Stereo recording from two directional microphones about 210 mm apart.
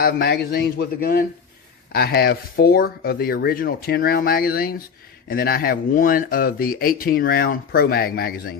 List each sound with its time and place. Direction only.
0.0 s speech: 50° left (ahead or behind)